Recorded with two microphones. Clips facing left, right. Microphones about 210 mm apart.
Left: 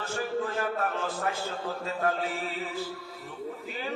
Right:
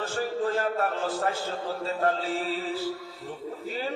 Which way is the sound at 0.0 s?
35° right (ahead or behind).